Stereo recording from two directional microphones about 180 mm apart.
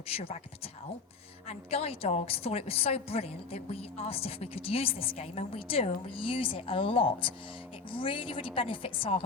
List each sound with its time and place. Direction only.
0.1 s a woman's voice: 35° left (ahead or behind)